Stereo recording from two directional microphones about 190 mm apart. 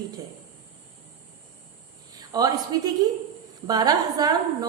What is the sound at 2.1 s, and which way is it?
A woman's voice, 20° right (ahead or behind).